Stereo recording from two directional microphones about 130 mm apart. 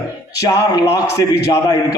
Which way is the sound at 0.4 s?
25° left (ahead or behind).